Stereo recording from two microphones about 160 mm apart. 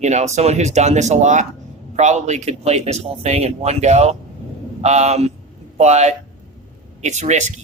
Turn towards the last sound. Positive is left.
turn(degrees=-45)  # may be behind; listen again after turning